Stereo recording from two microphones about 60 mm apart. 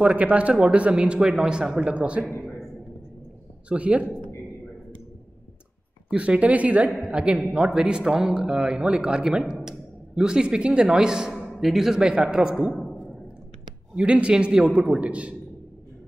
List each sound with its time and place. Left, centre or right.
0.0 s a man's voice: right
3.6 s a man's voice: right
6.0 s a man's voice: centre
13.9 s a man's voice: centre